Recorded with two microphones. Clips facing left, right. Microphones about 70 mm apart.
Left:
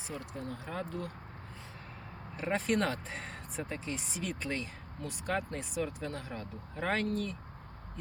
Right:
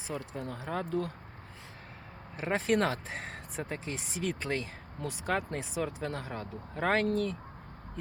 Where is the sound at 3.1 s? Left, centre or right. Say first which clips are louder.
Right 2 dB; right.